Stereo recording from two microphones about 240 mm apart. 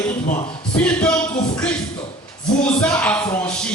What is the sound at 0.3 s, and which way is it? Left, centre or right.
Speech, left.